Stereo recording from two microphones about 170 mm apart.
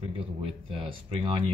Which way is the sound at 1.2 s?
30° right (ahead or behind).